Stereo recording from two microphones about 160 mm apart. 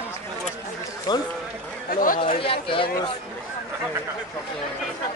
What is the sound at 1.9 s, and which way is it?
Speech, 60° left (ahead or behind).